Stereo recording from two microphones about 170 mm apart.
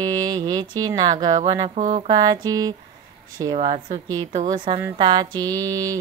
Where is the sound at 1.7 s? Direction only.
40° right (ahead or behind).